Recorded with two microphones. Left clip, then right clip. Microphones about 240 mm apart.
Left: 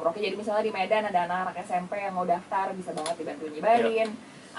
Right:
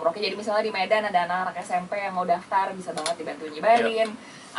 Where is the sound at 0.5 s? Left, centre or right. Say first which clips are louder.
Right 3 dB; centre.